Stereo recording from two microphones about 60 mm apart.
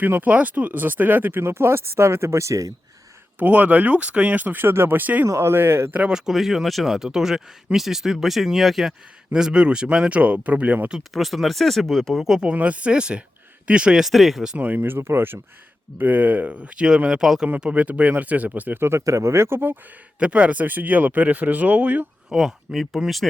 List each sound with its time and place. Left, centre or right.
0.0 s speech: right
1.4 s speech: right
3.3 s speech: right
6.0 s speech: centre
11.1 s speech: centre
12.4 s speech: right
14.0 s speech: centre
14.5 s speech: right
14.8 s speech: right
18.8 s speech: right
20.1 s speech: centre
22.3 s speech: centre